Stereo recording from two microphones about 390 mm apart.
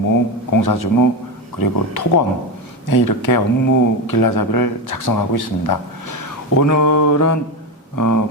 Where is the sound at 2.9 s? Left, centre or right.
Left.